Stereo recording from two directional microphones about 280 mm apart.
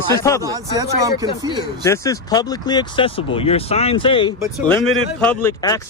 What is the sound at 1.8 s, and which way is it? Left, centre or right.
Speech, centre.